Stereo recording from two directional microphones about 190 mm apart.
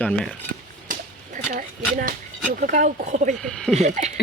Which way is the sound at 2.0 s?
45° right (ahead or behind).